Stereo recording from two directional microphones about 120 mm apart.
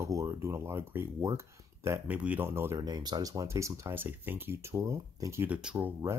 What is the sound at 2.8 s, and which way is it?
Speech, 35° right (ahead or behind).